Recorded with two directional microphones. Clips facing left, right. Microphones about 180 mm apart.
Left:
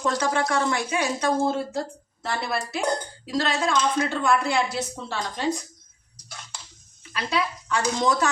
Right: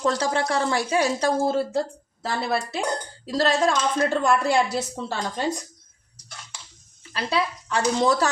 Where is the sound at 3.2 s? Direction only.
40° right (ahead or behind).